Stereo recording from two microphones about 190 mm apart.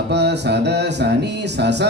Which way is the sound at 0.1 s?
65° right (ahead or behind).